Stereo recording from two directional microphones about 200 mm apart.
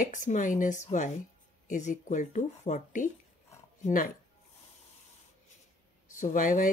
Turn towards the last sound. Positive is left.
turn(degrees=40)  # may be behind; listen again after turning